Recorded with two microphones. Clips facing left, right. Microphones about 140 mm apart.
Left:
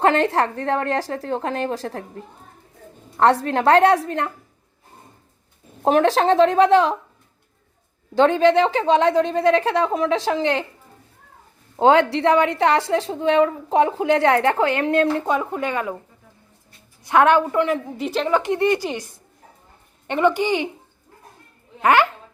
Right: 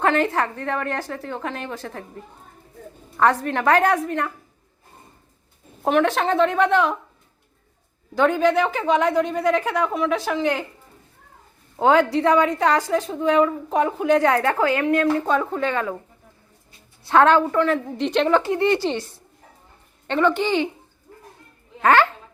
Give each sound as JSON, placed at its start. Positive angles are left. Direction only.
{"t": 0.0, "sound": "a woman's voice", "side_deg": 35}
{"t": 3.2, "sound": "a woman's voice", "side_deg": 30}
{"t": 5.8, "sound": "a woman's voice", "side_deg": 35}
{"t": 8.1, "sound": "a woman's voice", "side_deg": 30}
{"t": 11.8, "sound": "a woman's voice", "side_deg": 25}
{"t": 15.3, "sound": "a woman's voice", "side_deg": 15}
{"t": 17.0, "sound": "a woman's voice", "side_deg": 15}
{"t": 21.8, "sound": "speech", "side_deg": 15}